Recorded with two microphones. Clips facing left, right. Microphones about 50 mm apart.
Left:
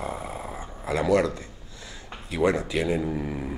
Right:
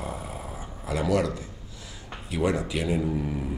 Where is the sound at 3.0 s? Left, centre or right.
Centre.